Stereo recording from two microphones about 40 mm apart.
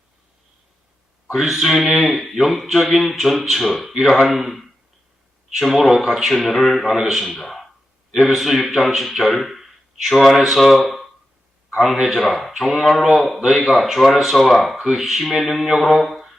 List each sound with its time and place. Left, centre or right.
1.3 s speech: centre
6.3 s speech: centre
7.3 s speech: centre
8.1 s a man's voice: centre
12.1 s speech: centre
15.9 s mantra: centre